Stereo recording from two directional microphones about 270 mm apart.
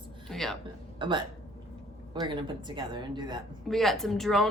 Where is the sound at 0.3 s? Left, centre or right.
Centre.